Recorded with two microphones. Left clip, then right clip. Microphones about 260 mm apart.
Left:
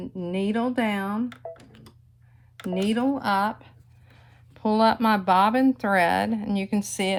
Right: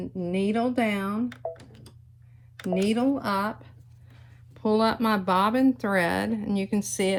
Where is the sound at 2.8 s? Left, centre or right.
Left.